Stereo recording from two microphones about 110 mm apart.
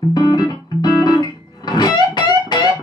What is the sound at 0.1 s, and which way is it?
Music, 40° left (ahead or behind).